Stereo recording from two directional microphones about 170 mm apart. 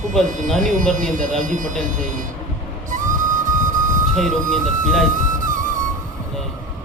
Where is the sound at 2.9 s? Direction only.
50° right (ahead or behind).